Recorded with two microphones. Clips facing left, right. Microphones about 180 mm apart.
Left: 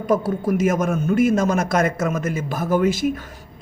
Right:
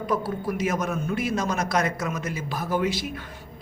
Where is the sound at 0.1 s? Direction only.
45° left (ahead or behind).